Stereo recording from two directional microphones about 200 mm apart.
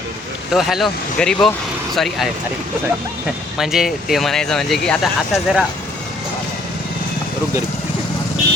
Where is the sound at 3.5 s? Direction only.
Centre (ahead or behind).